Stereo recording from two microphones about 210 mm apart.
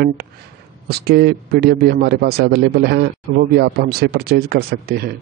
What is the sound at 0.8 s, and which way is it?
A man's voice, 50° right (ahead or behind).